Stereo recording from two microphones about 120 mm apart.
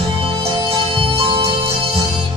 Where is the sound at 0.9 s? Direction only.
45° right (ahead or behind).